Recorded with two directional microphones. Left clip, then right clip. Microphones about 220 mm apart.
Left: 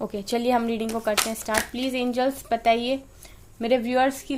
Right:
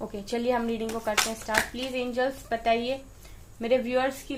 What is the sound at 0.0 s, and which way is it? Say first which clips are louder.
Speech: left 4 dB; 50° left (ahead or behind).